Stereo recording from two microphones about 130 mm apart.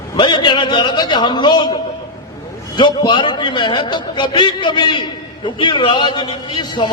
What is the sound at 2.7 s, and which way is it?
A man's voice, 35° left (ahead or behind).